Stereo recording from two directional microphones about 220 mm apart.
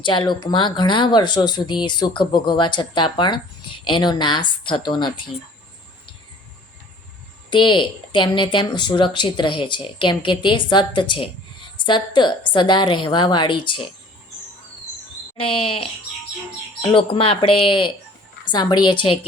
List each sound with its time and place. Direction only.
0.0 s a woman's voice: 20° left (ahead or behind)
7.5 s a woman's voice: 20° left (ahead or behind)
15.6 s a woman's voice: 25° left (ahead or behind)